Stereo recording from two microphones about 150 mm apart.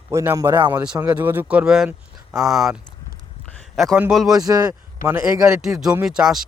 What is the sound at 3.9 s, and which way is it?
Speech, 5° right (ahead or behind).